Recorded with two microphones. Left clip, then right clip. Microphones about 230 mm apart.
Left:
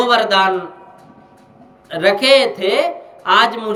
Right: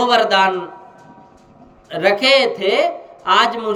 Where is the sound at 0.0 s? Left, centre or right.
Centre.